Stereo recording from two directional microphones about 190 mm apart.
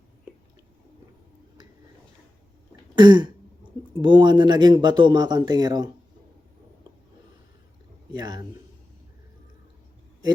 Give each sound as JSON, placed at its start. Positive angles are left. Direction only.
{"t": 2.9, "sound": "throat clearing", "side_deg": -25}
{"t": 4.0, "sound": "speech", "side_deg": -25}
{"t": 8.1, "sound": "speech", "side_deg": -20}